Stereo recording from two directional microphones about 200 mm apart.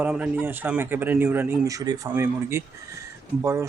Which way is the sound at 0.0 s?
5° right (ahead or behind).